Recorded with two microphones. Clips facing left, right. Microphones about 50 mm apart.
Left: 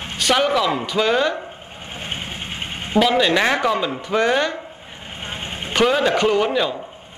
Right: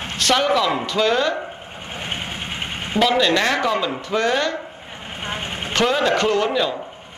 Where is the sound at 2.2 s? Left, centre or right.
Centre.